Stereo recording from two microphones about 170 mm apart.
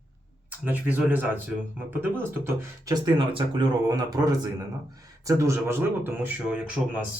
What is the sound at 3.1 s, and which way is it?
Speech, 30° right (ahead or behind).